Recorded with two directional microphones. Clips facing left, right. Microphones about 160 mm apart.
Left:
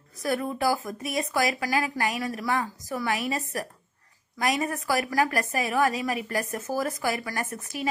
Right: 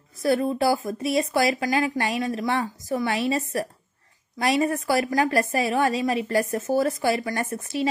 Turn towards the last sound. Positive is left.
turn(degrees=-30)  # may be behind; listen again after turning